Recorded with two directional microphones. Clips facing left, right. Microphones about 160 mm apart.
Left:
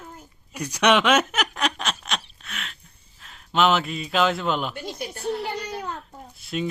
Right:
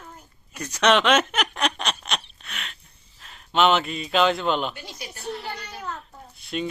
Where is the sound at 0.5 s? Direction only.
10° left (ahead or behind).